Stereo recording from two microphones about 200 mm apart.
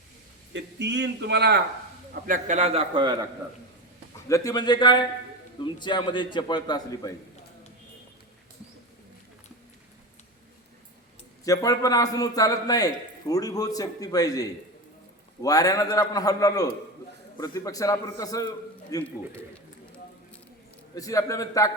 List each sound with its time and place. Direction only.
0.5 s a man's voice: 60° right (ahead or behind)
2.2 s a man's voice: 40° right (ahead or behind); by 3.2 s 25° right (ahead or behind)
4.3 s a man's voice: 15° left (ahead or behind)
11.4 s a man's voice: 15° left (ahead or behind)
20.9 s a man's voice: 15° left (ahead or behind)